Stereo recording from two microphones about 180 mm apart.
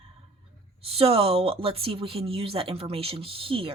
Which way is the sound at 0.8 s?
30° right (ahead or behind).